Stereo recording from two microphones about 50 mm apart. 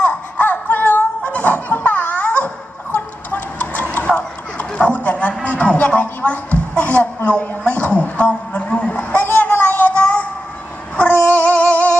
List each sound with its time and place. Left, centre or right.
0.0 s music: left
2.9 s tick-tock: left
4.7 s a sound: left
11.1 s music: left